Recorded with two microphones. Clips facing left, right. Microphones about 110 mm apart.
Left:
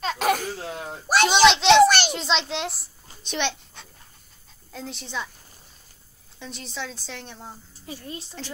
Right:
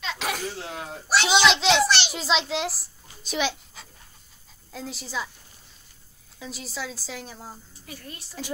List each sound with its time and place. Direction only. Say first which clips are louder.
0.0 s a sound: left 7 dB; 45° left (ahead or behind)
1.0 s a child's voice: left 4 dB; 50° left (ahead or behind)
1.5 s speech: left 4 dB; centre (ahead or behind)
1.8 s a child's voice: left 7 dB; 50° left (ahead or behind)
2.1 s a child's voice: right 1 dB; 5° right (ahead or behind)
6.4 s speech: even; 5° right (ahead or behind)
7.8 s a woman's voice: left 7 dB; 25° left (ahead or behind)